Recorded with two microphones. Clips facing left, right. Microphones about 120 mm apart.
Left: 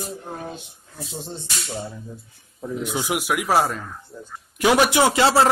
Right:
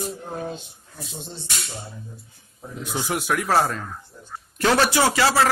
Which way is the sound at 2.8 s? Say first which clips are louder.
Even; 15° left (ahead or behind).